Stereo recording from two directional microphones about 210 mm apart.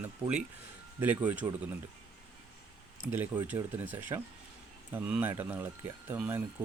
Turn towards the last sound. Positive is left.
turn(degrees=-10)  # may be behind; listen again after turning